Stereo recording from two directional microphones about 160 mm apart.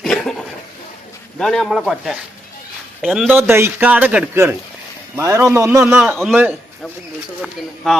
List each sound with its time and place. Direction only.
0.0 s dog: centre (ahead or behind)
1.4 s speech: centre (ahead or behind)
3.3 s a man's voice: 15° right (ahead or behind)
5.1 s a man's voice: 15° right (ahead or behind)